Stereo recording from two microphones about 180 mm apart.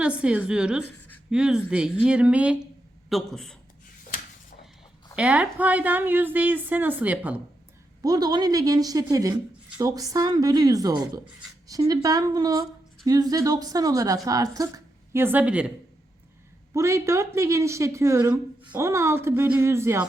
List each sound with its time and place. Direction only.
0.0 s a woman's voice: 5° right (ahead or behind)
5.1 s a woman's voice: 5° right (ahead or behind)
8.0 s a woman's voice: 20° right (ahead or behind)
16.7 s a woman's voice: 15° right (ahead or behind)